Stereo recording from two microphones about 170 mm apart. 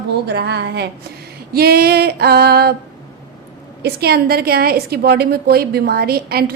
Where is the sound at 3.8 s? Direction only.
70° right (ahead or behind).